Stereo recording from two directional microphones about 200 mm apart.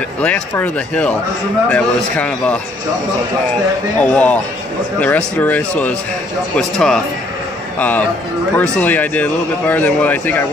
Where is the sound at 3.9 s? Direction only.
5° left (ahead or behind).